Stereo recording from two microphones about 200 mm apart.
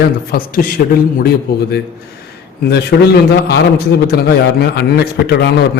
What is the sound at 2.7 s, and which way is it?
A man's voice, 55° left (ahead or behind).